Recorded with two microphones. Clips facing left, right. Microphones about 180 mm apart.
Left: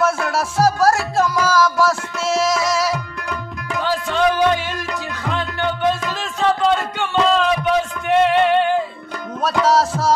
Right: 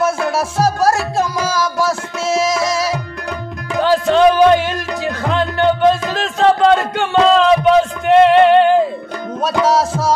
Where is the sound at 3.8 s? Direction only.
80° right.